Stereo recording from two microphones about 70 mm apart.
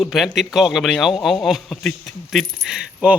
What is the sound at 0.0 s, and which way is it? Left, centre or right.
Speech, centre.